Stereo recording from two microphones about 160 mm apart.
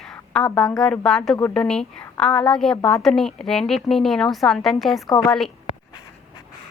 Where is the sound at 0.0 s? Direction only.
5° left (ahead or behind).